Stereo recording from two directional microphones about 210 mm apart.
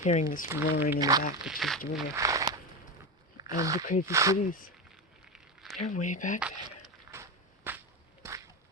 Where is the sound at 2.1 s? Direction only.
15° right (ahead or behind).